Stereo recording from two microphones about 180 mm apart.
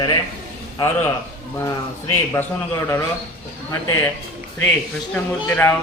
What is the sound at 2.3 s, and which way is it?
Speech, 15° left (ahead or behind).